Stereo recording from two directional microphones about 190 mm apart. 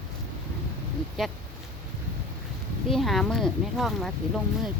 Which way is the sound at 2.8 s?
Centre (ahead or behind).